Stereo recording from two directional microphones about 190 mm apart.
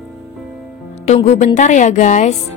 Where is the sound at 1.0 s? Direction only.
35° left (ahead or behind).